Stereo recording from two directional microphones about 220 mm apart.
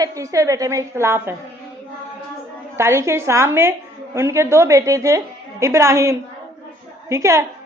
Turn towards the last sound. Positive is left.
turn(degrees=-15)  # may be behind; listen again after turning